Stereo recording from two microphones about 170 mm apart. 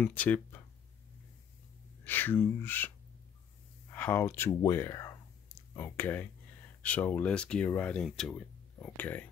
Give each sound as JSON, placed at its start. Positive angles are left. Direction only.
{"t": 0.0, "sound": "speech", "side_deg": 10}
{"t": 2.0, "sound": "speech", "side_deg": 10}
{"t": 3.9, "sound": "speech", "side_deg": 10}